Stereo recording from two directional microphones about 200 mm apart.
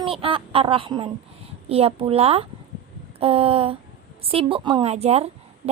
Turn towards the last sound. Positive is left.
turn(degrees=-30)  # may be behind; listen again after turning